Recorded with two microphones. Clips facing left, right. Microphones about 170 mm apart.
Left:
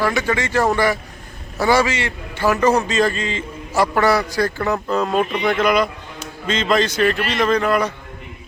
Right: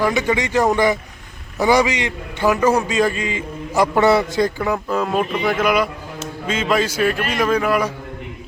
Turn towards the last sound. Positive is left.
turn(degrees=-10)  # may be behind; listen again after turning